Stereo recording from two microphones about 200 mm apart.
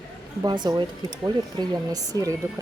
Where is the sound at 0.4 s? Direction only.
20° right (ahead or behind).